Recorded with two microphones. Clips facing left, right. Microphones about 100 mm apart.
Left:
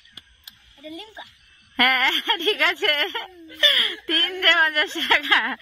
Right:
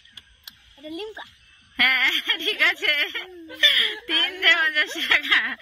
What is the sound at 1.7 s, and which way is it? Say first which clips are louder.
Speech: left 4 dB; 45° left (ahead or behind).